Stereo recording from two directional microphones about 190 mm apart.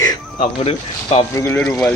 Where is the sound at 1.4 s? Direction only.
15° left (ahead or behind).